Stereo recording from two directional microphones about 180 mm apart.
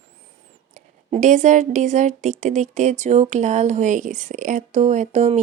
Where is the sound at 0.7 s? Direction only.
45° right (ahead or behind).